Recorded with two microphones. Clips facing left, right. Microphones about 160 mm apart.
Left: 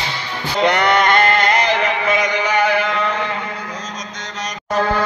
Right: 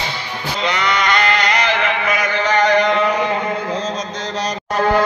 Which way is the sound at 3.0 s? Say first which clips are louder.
Right 4 dB; 15° right (ahead or behind).